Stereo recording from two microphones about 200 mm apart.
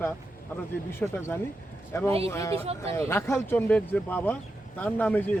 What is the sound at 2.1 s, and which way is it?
Speech, 30° right (ahead or behind).